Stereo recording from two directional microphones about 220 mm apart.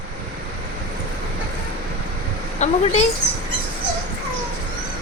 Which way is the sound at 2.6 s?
30° left (ahead or behind).